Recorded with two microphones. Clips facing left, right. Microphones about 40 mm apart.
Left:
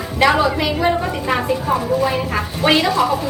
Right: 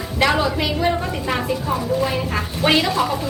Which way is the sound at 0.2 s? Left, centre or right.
Centre.